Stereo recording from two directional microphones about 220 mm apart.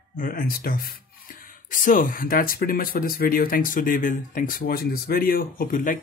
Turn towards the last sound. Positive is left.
turn(degrees=40)  # may be behind; listen again after turning